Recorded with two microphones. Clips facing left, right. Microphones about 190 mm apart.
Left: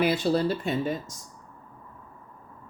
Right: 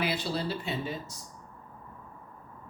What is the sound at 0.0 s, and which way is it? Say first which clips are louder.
Speech: left 8 dB; 50° left (ahead or behind).